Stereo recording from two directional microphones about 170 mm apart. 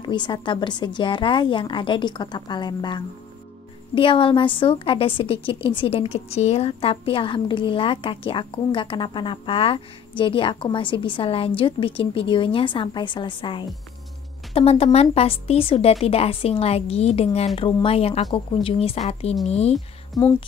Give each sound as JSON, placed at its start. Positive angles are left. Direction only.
{"t": 0.0, "sound": "a woman's voice", "side_deg": 25}